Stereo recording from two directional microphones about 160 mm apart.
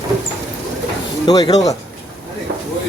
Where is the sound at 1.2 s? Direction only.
25° left (ahead or behind).